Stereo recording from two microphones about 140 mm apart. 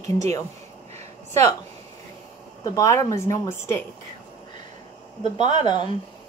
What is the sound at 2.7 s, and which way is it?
Speech, 20° left (ahead or behind).